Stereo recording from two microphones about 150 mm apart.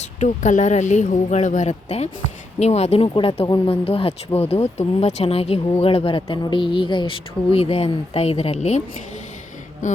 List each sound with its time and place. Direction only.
0.0 s speech: 50° left (ahead or behind)